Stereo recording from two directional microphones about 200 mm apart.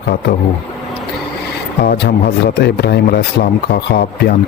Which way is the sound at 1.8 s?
50° left (ahead or behind).